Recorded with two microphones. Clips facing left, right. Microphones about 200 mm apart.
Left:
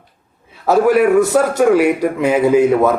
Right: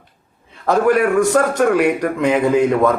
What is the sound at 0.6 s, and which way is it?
A man's voice, 5° left (ahead or behind).